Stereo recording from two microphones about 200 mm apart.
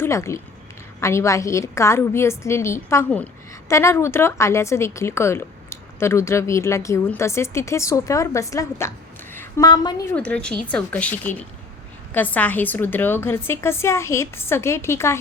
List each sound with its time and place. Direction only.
0.0 s speech: 15° left (ahead or behind)
9.3 s a sound: 15° left (ahead or behind)
10.2 s speech: 5° left (ahead or behind)